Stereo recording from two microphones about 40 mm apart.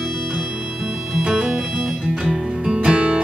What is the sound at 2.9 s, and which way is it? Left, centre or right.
Music, right.